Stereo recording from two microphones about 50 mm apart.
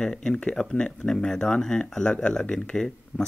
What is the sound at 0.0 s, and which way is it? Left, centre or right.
Speech, centre.